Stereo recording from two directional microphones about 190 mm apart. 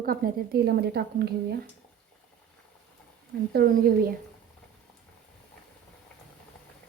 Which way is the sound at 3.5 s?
50° right (ahead or behind).